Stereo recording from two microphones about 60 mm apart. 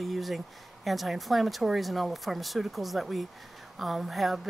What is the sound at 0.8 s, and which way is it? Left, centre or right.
Speech, centre.